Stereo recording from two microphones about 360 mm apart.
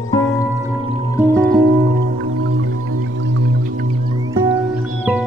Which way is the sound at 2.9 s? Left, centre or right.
Right.